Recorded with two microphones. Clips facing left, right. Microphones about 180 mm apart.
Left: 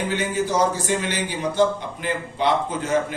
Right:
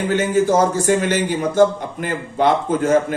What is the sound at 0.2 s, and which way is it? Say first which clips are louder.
A man's voice: right 7 dB; 45° right (ahead or behind).